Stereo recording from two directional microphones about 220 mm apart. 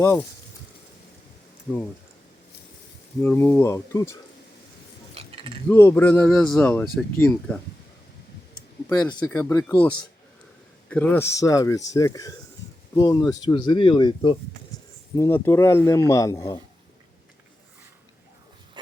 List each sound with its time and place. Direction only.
3.2 s speech: 10° left (ahead or behind)
5.1 s mechanisms: 25° right (ahead or behind)
5.6 s speech: 10° left (ahead or behind)
8.9 s speech: 20° left (ahead or behind)
14.7 s a sound: 15° left (ahead or behind)
15.1 s speech: 15° left (ahead or behind)